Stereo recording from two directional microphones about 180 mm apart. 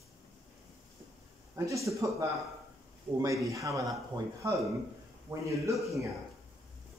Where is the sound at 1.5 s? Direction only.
15° right (ahead or behind).